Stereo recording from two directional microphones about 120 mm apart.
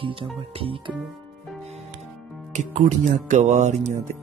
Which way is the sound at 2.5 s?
80° right.